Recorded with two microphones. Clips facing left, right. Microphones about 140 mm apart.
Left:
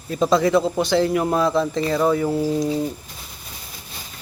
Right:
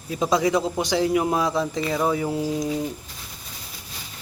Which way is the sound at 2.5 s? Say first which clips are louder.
Left 4 dB; 30° left (ahead or behind).